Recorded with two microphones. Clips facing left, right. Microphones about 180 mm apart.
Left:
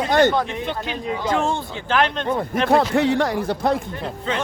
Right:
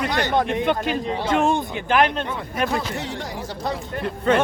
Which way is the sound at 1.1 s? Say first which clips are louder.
Left 1 dB; 30° right (ahead or behind).